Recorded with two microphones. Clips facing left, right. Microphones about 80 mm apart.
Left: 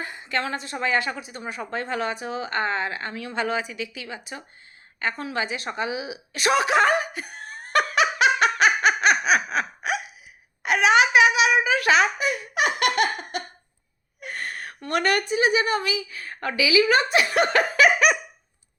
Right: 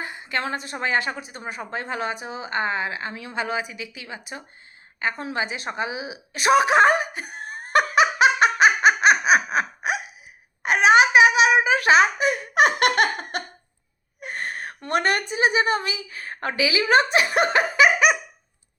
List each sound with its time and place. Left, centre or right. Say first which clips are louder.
0.0 s a woman's voice: even; centre
4.9 s a sound: right 1 dB; centre
10.6 s wail: right 2 dB; right
14.2 s gasp: right 2 dB; right
14.8 s a woman's voice: even; right; by 18.2 s centre